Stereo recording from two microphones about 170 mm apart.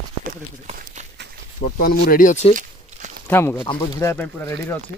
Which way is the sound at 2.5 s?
45° right (ahead or behind).